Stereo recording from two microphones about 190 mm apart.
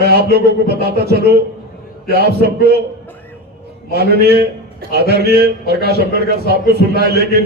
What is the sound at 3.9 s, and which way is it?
A man's voice, 55° right (ahead or behind).